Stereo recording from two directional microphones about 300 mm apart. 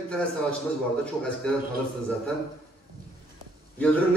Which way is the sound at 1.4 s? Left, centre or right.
Centre.